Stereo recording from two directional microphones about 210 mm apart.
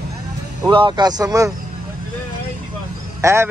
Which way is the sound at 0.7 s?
20° right (ahead or behind).